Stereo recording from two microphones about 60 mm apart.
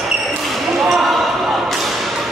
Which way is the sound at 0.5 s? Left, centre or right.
Centre.